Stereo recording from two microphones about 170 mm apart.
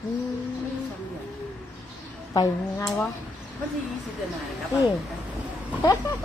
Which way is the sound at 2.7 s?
10° left (ahead or behind).